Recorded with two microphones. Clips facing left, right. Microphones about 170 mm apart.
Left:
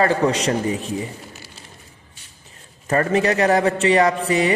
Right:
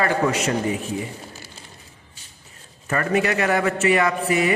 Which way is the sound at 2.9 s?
30° left (ahead or behind).